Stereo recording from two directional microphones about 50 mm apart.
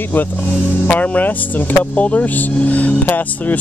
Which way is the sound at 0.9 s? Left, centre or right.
Left.